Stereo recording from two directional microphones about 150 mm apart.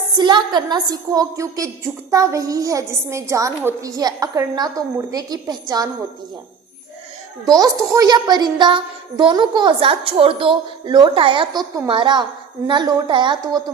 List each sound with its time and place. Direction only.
0.2 s a woman's voice: 30° right (ahead or behind)
7.4 s child singing: 25° right (ahead or behind)
12.6 s a woman's voice: 30° right (ahead or behind)